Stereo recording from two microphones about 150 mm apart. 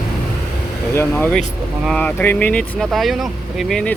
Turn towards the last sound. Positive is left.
turn(degrees=5)  # may be behind; listen again after turning